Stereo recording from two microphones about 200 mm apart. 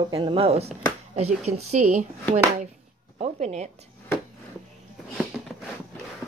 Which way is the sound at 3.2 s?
35° right (ahead or behind).